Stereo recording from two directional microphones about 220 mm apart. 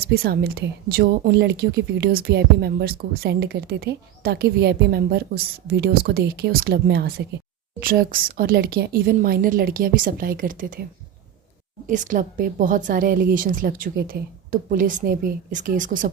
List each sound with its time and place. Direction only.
0.0 s a woman's voice: 45° right (ahead or behind)
11.9 s a woman's voice: 35° right (ahead or behind)